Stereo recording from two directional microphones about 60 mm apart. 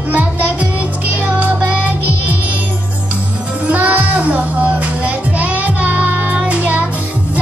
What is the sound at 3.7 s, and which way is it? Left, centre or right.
Music, right.